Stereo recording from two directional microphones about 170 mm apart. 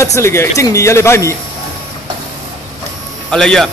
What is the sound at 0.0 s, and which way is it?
Speech, 15° left (ahead or behind).